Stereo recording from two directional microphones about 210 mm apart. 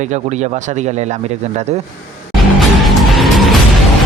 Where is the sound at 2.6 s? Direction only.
Centre (ahead or behind).